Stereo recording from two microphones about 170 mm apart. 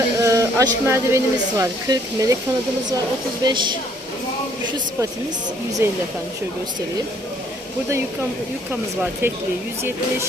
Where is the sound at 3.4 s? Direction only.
25° right (ahead or behind).